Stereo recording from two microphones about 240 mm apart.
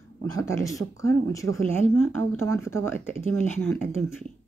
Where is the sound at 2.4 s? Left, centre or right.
Centre.